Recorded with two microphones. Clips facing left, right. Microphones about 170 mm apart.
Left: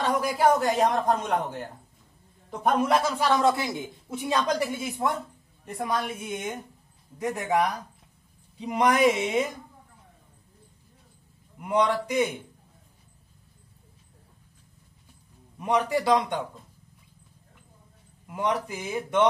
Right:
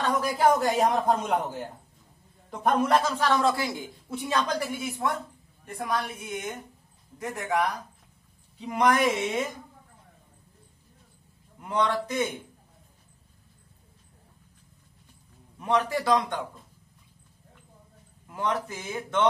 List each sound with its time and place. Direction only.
0.1 s a man's voice: 10° left (ahead or behind)
0.5 s a man's voice: centre (ahead or behind)
2.8 s a man's voice: 10° left (ahead or behind)
5.9 s a man's voice: 20° left (ahead or behind)
11.6 s a man's voice: 15° left (ahead or behind)
15.6 s a man's voice: 15° left (ahead or behind)
18.2 s a man's voice: 10° left (ahead or behind)